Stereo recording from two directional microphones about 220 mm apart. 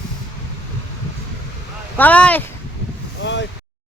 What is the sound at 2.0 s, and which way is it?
Speech, 5° left (ahead or behind).